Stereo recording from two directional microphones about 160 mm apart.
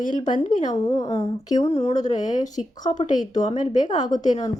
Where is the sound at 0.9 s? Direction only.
20° left (ahead or behind).